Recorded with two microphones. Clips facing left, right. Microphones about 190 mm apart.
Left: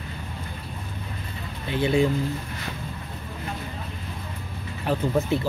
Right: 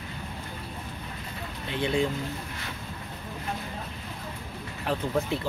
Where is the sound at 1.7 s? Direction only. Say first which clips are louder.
Left 5 dB; 5° left (ahead or behind).